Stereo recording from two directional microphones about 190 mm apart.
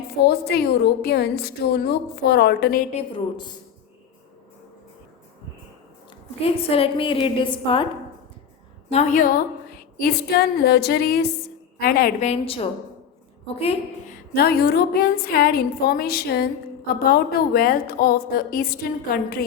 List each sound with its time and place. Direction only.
0.3 s a woman's voice: 55° left (ahead or behind)
2.9 s a woman's voice: 25° left (ahead or behind)
6.4 s a woman's voice: 30° left (ahead or behind)
8.9 s a woman's voice: 40° left (ahead or behind)
10.0 s a woman's voice: 55° left (ahead or behind)
12.3 s a woman's voice: 30° left (ahead or behind)
14.3 s a woman's voice: 55° left (ahead or behind)